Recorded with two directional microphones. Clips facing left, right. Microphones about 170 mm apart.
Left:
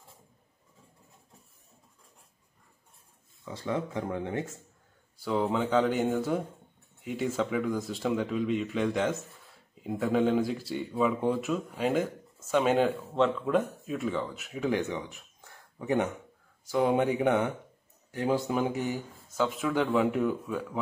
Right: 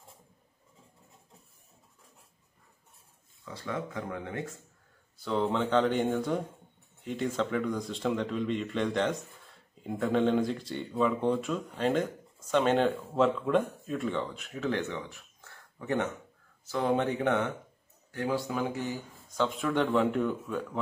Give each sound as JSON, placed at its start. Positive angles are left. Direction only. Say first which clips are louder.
{"t": 3.4, "sound": "speech", "louder": "left 4 dB", "side_deg": 20}
{"t": 5.1, "sound": "speech", "louder": "left 1 dB", "side_deg": 10}
{"t": 19.3, "sound": "speech", "louder": "left 1 dB", "side_deg": 5}